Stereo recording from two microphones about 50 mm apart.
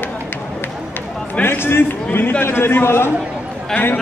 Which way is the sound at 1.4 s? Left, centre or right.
Left.